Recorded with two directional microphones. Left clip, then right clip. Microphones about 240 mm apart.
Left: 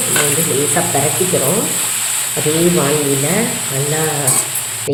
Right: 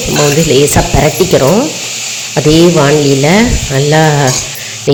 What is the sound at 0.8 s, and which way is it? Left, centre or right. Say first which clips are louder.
Speech: right 6 dB; right.